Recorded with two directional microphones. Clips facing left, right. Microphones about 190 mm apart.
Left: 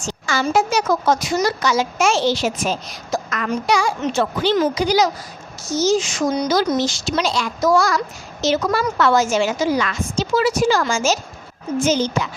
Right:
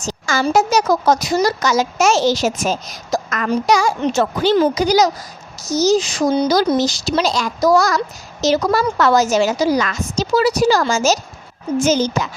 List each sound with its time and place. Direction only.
0.0 s speech: 40° right (ahead or behind)